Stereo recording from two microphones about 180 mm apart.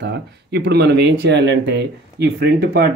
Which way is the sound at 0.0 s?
65° right (ahead or behind).